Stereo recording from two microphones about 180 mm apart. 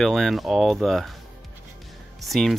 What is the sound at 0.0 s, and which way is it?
Speech, centre (ahead or behind).